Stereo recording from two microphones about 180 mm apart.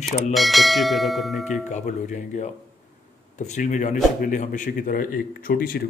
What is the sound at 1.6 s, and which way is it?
Speech, 40° left (ahead or behind).